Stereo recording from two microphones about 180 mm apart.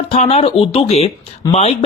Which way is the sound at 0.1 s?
35° left (ahead or behind).